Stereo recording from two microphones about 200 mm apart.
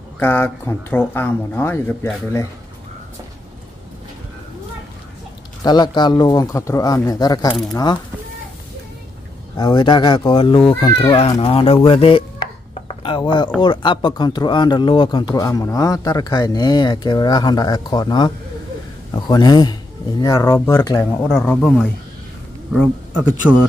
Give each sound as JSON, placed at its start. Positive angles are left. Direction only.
{"t": 0.2, "sound": "speech", "side_deg": 10}
{"t": 5.6, "sound": "speech", "side_deg": 20}
{"t": 9.6, "sound": "speech", "side_deg": 20}
{"t": 12.8, "sound": "a sound", "side_deg": 25}
{"t": 13.6, "sound": "speech", "side_deg": 20}
{"t": 21.3, "sound": "speech", "side_deg": 5}